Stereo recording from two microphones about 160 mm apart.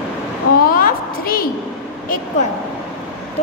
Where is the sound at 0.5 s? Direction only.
65° left (ahead or behind).